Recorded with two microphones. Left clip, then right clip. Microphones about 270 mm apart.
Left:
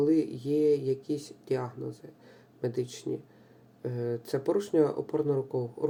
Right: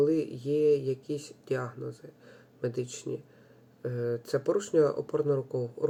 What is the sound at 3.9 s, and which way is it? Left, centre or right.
Speech, centre.